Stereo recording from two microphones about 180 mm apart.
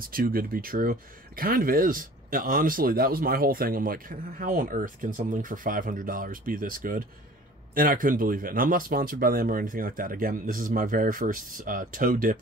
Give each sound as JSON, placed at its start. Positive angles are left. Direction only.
{"t": 0.0, "sound": "speech", "side_deg": -55}